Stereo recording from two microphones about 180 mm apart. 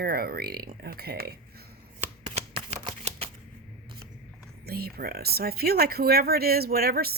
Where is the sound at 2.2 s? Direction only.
30° right (ahead or behind).